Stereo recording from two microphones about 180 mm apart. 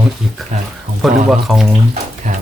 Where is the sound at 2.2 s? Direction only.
40° right (ahead or behind).